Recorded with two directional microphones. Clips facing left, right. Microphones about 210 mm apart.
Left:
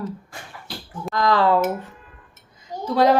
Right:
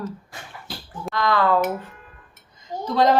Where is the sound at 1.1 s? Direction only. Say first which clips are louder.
Left 2 dB; 40° left (ahead or behind).